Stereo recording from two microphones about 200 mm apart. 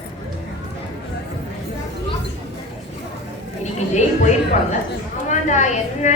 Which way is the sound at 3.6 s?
35° left (ahead or behind).